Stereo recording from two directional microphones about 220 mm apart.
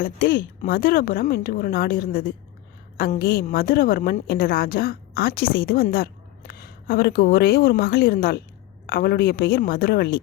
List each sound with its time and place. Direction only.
0.0 s a woman's voice: 40° left (ahead or behind)